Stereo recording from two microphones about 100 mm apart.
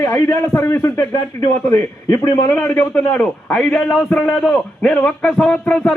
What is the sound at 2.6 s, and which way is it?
A man's voice, 15° left (ahead or behind).